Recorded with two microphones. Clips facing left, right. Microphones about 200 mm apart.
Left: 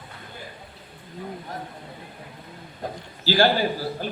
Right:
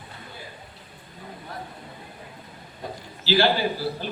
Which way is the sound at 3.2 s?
45° left (ahead or behind).